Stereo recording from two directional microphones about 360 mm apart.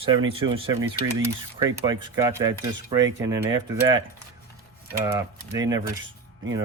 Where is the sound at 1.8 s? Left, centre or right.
Centre.